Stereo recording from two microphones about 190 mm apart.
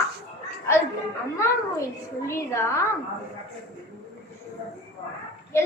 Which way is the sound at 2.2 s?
15° left (ahead or behind).